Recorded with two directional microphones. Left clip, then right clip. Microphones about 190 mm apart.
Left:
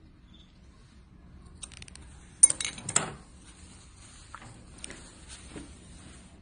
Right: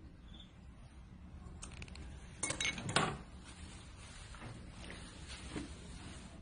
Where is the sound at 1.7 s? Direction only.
25° left (ahead or behind).